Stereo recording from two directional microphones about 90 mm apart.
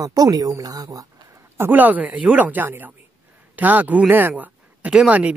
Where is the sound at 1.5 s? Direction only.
25° right (ahead or behind).